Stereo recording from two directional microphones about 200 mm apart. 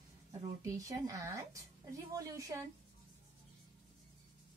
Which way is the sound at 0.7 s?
15° right (ahead or behind).